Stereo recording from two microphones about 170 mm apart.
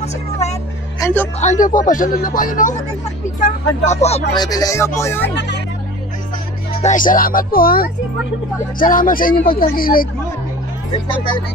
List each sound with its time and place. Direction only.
1.0 s speech: 15° left (ahead or behind)
1.4 s a man's voice: 50° left (ahead or behind)
4.3 s speech: 25° left (ahead or behind)
6.8 s a woman's voice: 50° left (ahead or behind)